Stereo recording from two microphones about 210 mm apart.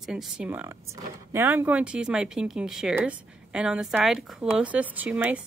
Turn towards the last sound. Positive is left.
turn(degrees=-5)  # may be behind; listen again after turning